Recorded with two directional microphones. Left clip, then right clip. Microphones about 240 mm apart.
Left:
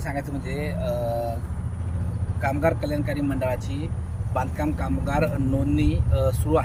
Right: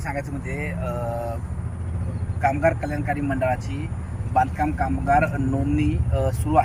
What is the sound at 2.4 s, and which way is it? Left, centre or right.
Speech, centre.